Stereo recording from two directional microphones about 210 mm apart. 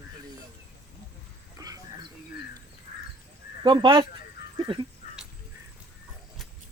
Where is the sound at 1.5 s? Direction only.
15° right (ahead or behind).